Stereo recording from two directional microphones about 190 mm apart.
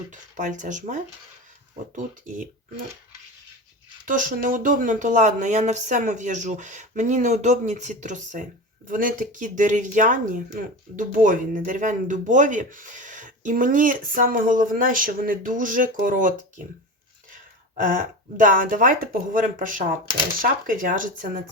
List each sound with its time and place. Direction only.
0.1 s speech: 40° right (ahead or behind)
4.0 s speech: 45° right (ahead or behind)
18.3 s speech: 45° right (ahead or behind)